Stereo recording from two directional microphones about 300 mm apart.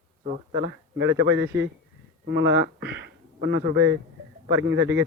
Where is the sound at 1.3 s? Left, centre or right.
Right.